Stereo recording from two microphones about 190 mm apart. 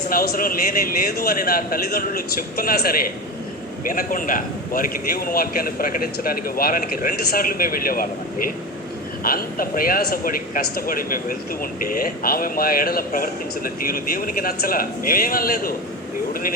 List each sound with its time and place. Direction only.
0.1 s a man's voice: 50° left (ahead or behind)